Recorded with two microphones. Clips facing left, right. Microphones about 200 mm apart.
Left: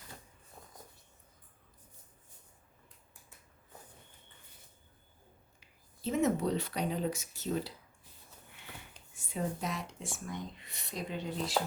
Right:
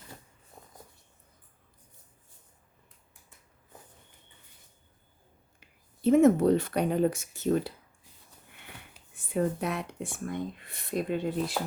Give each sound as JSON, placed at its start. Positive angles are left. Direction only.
{"t": 5.5, "sound": "speech", "side_deg": -55}
{"t": 9.1, "sound": "speech", "side_deg": -60}